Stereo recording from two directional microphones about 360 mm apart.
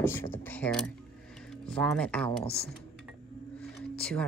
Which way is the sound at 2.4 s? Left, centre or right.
Centre.